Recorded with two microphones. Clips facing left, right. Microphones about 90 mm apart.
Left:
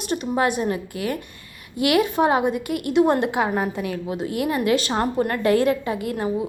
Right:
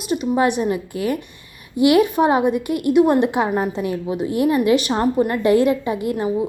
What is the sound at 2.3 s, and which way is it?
Speech, 25° right (ahead or behind).